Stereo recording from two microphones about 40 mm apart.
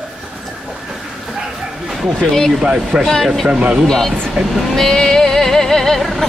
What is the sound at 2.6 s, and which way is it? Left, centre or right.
Speech, right.